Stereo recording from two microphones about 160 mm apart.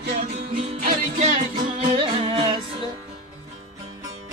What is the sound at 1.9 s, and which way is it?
Music, 35° right (ahead or behind).